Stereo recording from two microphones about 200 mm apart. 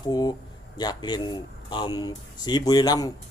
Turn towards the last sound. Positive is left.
turn(degrees=20)  # may be behind; listen again after turning